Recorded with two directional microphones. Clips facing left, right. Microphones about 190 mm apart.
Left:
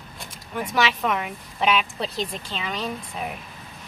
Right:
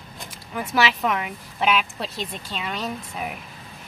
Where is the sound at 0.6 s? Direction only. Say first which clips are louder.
Right 1 dB; 5° right (ahead or behind).